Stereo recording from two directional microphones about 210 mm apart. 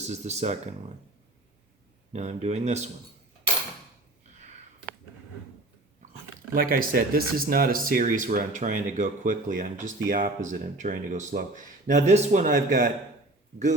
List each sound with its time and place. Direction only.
0.0 s speech: 30° right (ahead or behind)
2.1 s speech: 30° right (ahead or behind)
6.5 s speech: 45° right (ahead or behind)